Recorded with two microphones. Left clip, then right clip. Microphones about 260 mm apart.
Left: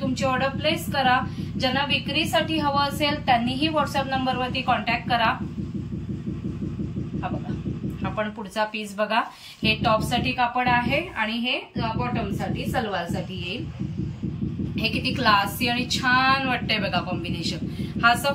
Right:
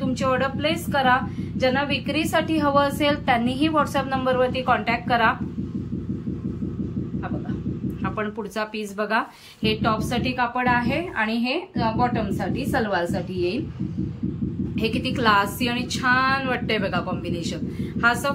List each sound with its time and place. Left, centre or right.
0.0 s a woman's voice: centre
8.0 s a woman's voice: centre; by 13.5 s right
14.8 s a woman's voice: centre